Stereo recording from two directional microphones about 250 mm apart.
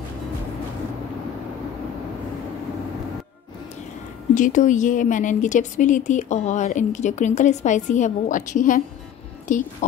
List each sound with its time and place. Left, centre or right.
4.3 s speech: left